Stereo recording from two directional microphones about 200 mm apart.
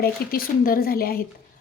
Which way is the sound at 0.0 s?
45° left (ahead or behind).